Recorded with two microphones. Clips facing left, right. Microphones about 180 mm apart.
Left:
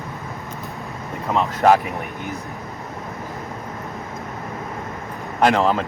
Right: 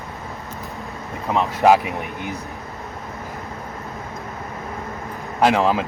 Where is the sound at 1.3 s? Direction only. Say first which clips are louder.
Right 1 dB; 5° right (ahead or behind).